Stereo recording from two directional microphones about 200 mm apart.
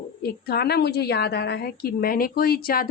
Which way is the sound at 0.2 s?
50° left (ahead or behind).